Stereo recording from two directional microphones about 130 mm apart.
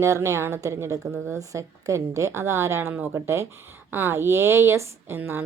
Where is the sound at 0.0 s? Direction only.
20° right (ahead or behind).